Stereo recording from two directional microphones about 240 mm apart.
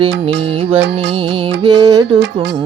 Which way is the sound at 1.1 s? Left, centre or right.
Right.